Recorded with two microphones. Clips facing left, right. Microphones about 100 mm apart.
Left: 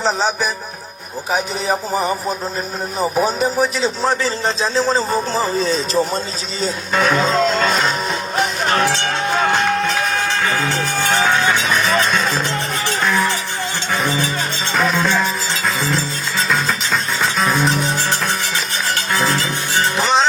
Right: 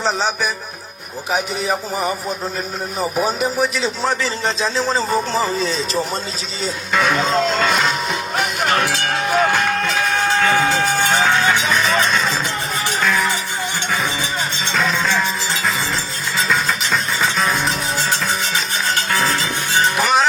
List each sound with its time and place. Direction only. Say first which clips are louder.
0.0 s speech: left 1 dB; 35° left (ahead or behind)
3.2 s speech: left 2 dB; 35° left (ahead or behind)
14.7 s music: left 2 dB; 10° left (ahead or behind)
16.5 s music: even; centre (ahead or behind)
20.0 s music: left 1 dB; 25° left (ahead or behind)